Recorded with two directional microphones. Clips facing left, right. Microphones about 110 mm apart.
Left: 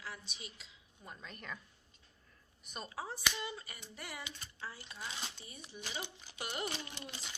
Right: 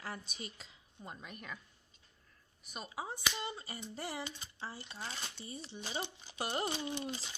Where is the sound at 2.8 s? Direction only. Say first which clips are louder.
Even; 15° right (ahead or behind); by 6.7 s 35° right (ahead or behind).